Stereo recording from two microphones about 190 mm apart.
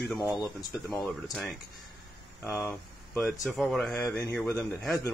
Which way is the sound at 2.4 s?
15° left (ahead or behind).